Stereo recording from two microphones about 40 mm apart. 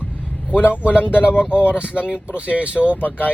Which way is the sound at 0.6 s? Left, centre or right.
Left.